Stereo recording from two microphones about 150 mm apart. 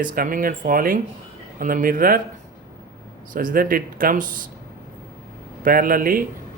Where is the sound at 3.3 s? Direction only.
70° right (ahead or behind).